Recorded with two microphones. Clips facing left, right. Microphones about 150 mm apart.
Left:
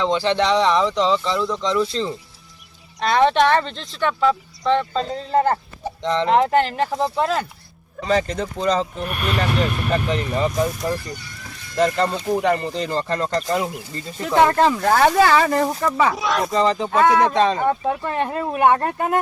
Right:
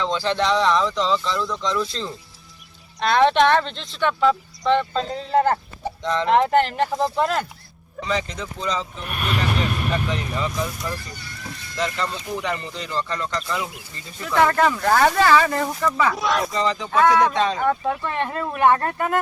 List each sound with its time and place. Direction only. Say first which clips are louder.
0.0 s speech: left 3 dB; 20° left (ahead or behind)
3.0 s speech: even; 5° left (ahead or behind)
6.0 s speech: left 3 dB; 20° left (ahead or behind)
6.3 s speech: even; 5° left (ahead or behind)
8.0 s speech: left 6 dB; 45° left (ahead or behind)
9.9 s speech: left 4 dB; 40° left (ahead or behind)
14.3 s speech: left 2 dB; 20° left (ahead or behind)
16.1 s speech: left 1 dB; centre (ahead or behind)
16.5 s speech: left 4 dB; 35° left (ahead or behind)
17.7 s speech: left 1 dB; 20° left (ahead or behind)